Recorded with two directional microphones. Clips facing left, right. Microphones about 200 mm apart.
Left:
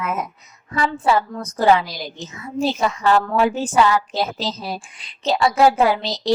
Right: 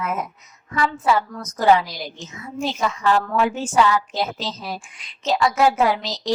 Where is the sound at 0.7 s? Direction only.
30° left (ahead or behind).